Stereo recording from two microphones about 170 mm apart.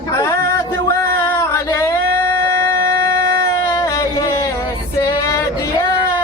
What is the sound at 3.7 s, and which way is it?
Music, 15° left (ahead or behind).